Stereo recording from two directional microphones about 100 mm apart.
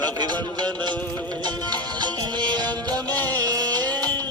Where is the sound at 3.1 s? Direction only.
15° left (ahead or behind).